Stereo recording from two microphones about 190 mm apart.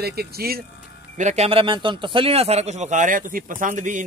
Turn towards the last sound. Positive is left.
turn(degrees=-40)  # may be behind; listen again after turning